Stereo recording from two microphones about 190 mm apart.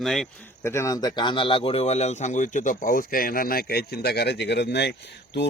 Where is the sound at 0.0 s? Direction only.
Centre (ahead or behind).